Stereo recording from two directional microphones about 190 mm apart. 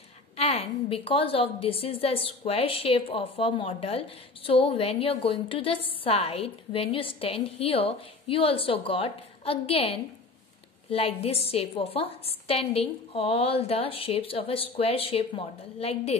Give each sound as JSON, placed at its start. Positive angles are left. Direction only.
{"t": 0.4, "sound": "a woman's voice", "side_deg": 30}